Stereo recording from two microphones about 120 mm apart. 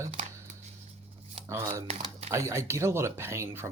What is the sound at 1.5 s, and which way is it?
Speech, 25° right (ahead or behind).